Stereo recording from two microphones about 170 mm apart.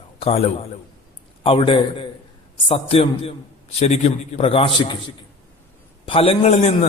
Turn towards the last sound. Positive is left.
turn(degrees=40)  # may be behind; listen again after turning